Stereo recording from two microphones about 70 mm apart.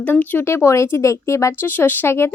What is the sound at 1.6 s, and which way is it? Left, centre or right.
Speech, left.